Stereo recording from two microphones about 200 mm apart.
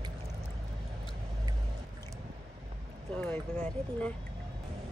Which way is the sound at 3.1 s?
5° left (ahead or behind).